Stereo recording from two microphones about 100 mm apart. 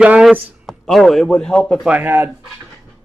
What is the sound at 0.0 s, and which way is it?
Speech, 10° right (ahead or behind).